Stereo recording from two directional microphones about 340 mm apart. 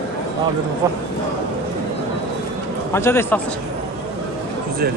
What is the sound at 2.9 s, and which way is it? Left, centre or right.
Speech, centre.